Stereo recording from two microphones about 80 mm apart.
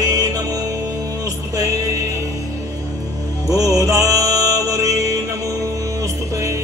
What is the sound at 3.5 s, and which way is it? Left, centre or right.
Music, right.